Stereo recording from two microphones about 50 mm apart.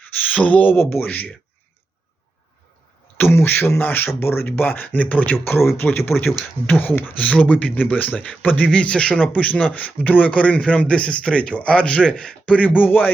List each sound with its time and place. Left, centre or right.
0.3 s speech: left
3.2 s a man's voice: left
5.7 s speech: left
7.3 s speech: left